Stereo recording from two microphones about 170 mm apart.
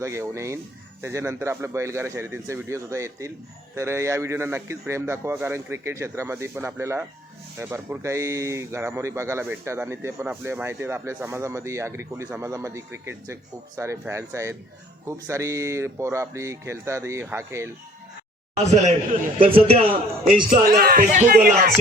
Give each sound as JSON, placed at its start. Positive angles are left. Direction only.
{"t": 0.0, "sound": "speech", "side_deg": -15}
{"t": 19.4, "sound": "a man's voice", "side_deg": -35}
{"t": 20.5, "sound": "speech", "side_deg": -60}
{"t": 21.3, "sound": "speech", "side_deg": -65}